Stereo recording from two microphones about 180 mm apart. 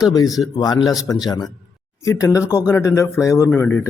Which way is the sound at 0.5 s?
20° left (ahead or behind).